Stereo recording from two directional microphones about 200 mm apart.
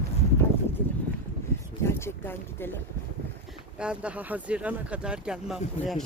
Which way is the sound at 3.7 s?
5° right (ahead or behind).